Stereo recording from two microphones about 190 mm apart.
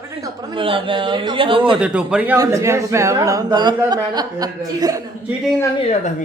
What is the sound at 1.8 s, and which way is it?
Speech, 5° right (ahead or behind).